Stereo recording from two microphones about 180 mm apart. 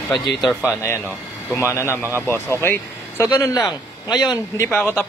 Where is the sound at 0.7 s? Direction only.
15° left (ahead or behind).